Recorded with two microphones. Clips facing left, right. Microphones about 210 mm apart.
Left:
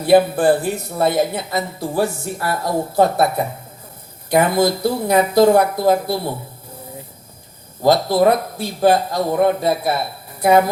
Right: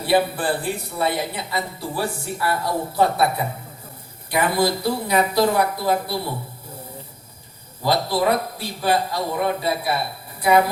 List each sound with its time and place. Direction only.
0.0 s speech: 45° left (ahead or behind)
7.8 s speech: 45° left (ahead or behind)